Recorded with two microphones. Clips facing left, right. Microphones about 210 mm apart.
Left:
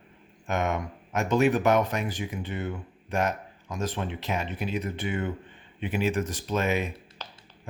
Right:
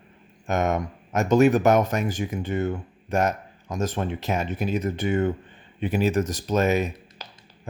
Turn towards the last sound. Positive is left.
turn(degrees=-10)  # may be behind; listen again after turning